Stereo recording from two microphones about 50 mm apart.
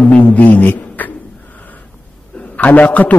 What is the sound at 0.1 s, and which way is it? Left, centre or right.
A man's voice, left.